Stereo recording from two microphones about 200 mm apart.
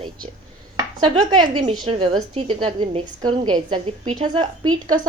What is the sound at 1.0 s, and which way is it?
A woman's voice, 25° right (ahead or behind).